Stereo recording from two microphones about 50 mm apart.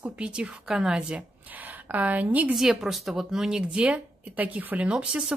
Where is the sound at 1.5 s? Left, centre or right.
Right.